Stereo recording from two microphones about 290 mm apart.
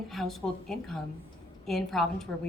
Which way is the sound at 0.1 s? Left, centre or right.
Centre.